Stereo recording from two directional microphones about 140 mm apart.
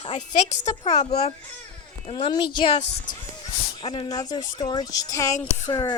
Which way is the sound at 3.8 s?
35° left (ahead or behind).